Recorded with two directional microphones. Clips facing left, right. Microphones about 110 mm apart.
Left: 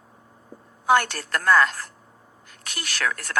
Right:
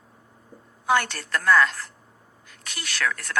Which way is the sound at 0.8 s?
50° left (ahead or behind).